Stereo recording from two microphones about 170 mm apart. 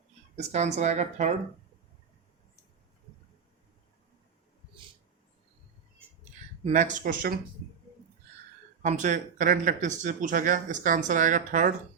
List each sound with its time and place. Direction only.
0.3 s speech: 40° right (ahead or behind)
6.7 s speech: 45° right (ahead or behind)
8.8 s speech: 45° right (ahead or behind)